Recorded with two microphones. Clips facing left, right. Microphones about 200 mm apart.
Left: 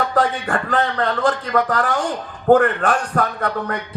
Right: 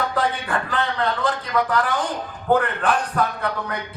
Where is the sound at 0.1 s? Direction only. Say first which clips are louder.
Left 4 dB; 45° left (ahead or behind).